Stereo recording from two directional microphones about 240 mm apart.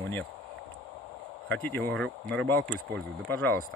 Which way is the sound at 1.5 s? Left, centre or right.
Centre.